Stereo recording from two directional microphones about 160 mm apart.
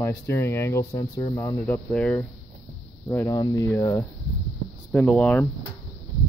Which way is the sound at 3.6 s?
15° left (ahead or behind).